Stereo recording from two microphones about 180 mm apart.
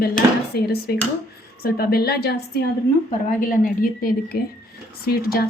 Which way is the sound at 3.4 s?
50° left (ahead or behind).